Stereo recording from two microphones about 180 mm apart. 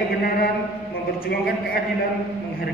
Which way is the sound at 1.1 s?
55° left (ahead or behind).